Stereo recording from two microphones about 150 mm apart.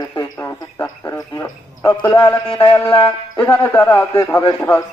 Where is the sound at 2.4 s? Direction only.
40° left (ahead or behind).